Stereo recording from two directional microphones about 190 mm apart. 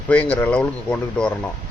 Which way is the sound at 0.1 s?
5° left (ahead or behind).